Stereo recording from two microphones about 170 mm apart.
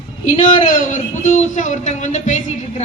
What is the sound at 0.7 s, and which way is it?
A woman's voice, 45° left (ahead or behind).